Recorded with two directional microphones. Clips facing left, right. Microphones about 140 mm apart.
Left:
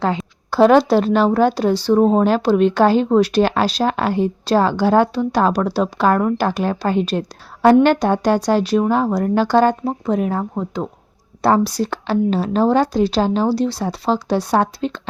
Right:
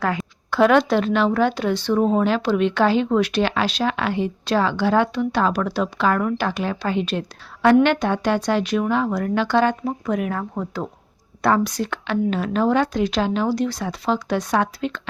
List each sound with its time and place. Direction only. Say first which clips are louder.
0.0 s a woman's voice: left 3 dB; 25° left (ahead or behind)
11.4 s a woman's voice: left 4 dB; 30° left (ahead or behind)